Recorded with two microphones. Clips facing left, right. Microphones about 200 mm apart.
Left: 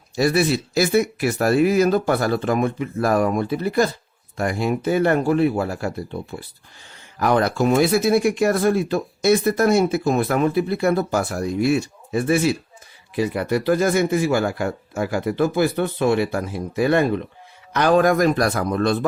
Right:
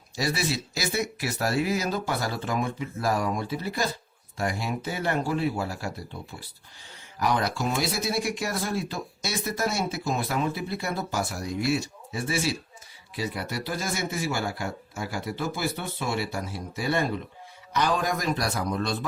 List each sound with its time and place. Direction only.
0.2 s speech: 55° left (ahead or behind)
7.2 s speech: 55° left (ahead or behind)